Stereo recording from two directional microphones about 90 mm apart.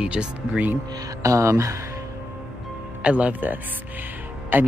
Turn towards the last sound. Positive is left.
turn(degrees=-20)  # may be behind; listen again after turning